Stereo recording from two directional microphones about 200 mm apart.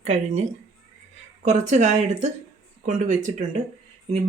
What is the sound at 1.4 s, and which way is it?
Speech, 35° right (ahead or behind).